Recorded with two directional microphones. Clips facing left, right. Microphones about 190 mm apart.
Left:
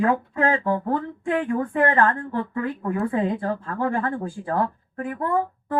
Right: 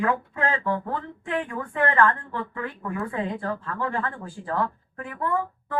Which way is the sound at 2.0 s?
45° left (ahead or behind).